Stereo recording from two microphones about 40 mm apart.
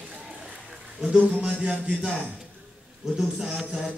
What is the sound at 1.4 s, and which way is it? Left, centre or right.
Speech, right.